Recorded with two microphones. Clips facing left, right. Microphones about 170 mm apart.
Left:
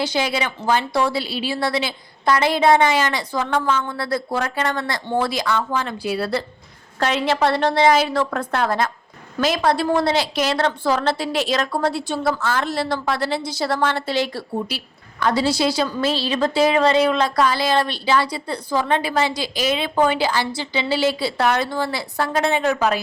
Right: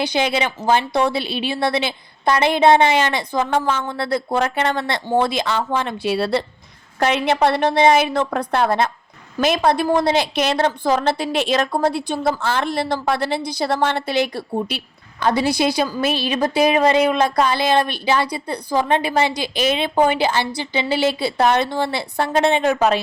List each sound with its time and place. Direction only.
0.0 s a woman's voice: 20° right (ahead or behind)